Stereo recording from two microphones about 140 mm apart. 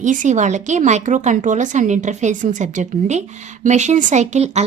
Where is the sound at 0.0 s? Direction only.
65° right (ahead or behind).